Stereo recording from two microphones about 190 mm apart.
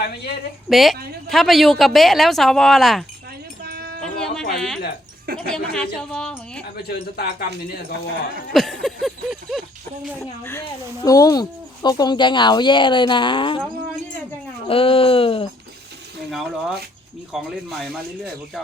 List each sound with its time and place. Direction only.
0.7 s speech: centre (ahead or behind)
3.6 s a sound: 55° right (ahead or behind)
4.0 s music: 5° left (ahead or behind)
5.5 s speech: 5° left (ahead or behind)
6.8 s speech: 55° left (ahead or behind)
8.5 s speech: centre (ahead or behind)
10.4 s speech: 15° left (ahead or behind)
14.7 s speech: 30° left (ahead or behind)
16.3 s speech: centre (ahead or behind)